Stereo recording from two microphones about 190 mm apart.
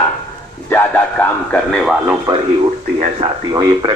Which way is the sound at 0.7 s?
5° left (ahead or behind).